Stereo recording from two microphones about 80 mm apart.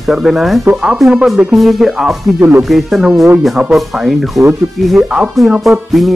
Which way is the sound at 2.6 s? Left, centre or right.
Centre.